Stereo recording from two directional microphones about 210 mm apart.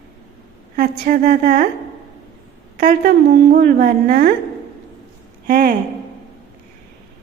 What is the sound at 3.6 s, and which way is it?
Speech, 50° right (ahead or behind).